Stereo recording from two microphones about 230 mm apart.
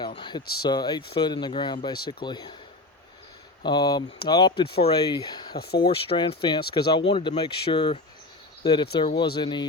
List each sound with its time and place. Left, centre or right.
0.0 s speech: centre
3.6 s speech: centre
5.5 s speech: left
5.8 s speech: left